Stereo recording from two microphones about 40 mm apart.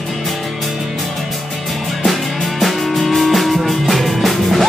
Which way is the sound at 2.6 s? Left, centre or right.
Centre.